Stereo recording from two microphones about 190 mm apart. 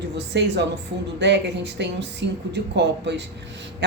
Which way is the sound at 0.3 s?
65° right (ahead or behind).